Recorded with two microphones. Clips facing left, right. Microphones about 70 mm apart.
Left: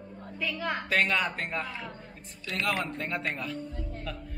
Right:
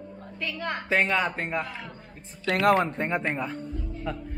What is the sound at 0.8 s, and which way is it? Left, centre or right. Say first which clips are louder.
Speech: right 4 dB; centre.